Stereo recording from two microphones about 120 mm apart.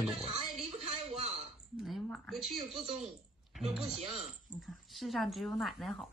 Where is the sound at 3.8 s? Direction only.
55° right (ahead or behind).